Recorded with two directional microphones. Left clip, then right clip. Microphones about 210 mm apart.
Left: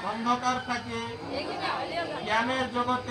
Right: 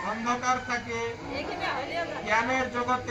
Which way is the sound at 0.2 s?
25° right (ahead or behind).